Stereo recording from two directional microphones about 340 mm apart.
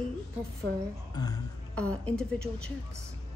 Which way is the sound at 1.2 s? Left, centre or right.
Centre.